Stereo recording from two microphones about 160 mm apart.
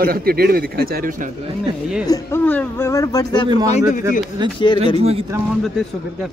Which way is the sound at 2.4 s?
10° left (ahead or behind).